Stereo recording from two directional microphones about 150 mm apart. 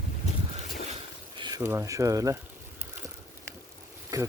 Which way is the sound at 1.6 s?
20° right (ahead or behind).